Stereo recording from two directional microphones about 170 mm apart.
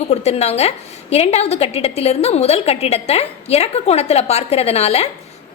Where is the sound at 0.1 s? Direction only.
40° left (ahead or behind).